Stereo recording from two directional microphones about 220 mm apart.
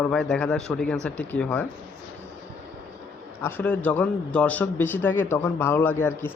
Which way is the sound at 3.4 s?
10° left (ahead or behind).